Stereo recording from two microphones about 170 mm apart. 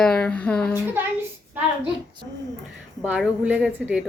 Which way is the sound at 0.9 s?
10° right (ahead or behind).